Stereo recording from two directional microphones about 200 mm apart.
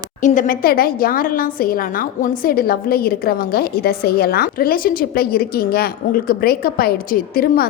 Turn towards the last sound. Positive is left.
turn(degrees=50)  # may be behind; listen again after turning